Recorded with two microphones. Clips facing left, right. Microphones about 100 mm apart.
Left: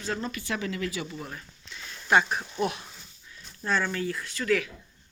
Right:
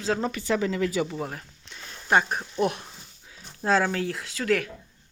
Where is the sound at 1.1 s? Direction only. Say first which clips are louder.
Right 6 dB; 75° right (ahead or behind).